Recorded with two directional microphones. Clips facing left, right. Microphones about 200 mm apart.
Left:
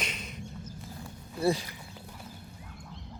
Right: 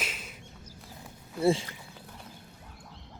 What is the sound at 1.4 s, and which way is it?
Speech, 25° right (ahead or behind).